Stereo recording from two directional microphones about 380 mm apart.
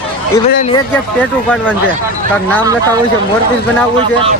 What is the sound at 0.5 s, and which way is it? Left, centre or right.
Speech, centre.